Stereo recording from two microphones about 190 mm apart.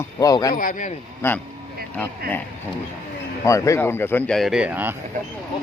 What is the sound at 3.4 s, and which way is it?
Speech, 15° left (ahead or behind).